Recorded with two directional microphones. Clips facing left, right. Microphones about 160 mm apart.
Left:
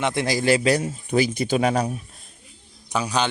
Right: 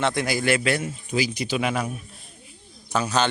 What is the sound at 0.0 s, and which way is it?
Speech, 25° left (ahead or behind).